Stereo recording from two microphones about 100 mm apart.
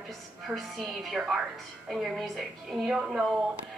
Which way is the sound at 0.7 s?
5° right (ahead or behind).